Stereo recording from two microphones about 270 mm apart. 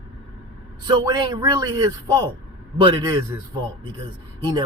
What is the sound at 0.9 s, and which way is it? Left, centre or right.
Speech, centre.